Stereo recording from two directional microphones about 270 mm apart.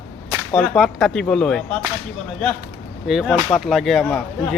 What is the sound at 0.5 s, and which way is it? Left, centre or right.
Speech, centre.